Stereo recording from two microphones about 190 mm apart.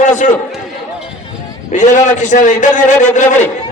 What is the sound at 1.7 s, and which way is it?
A man's voice, 40° left (ahead or behind).